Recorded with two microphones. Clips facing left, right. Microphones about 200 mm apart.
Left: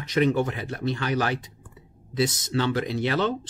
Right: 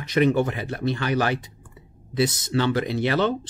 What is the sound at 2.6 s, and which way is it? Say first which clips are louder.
Speech: right 2 dB; 65° right (ahead or behind).